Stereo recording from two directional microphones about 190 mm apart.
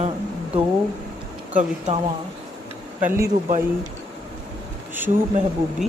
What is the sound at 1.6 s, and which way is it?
Speech, 35° right (ahead or behind).